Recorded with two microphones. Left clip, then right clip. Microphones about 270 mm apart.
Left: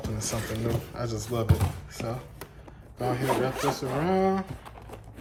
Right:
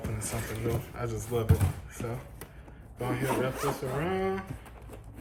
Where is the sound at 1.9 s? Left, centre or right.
Centre.